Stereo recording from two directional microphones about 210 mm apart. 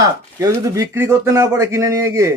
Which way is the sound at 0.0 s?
15° right (ahead or behind).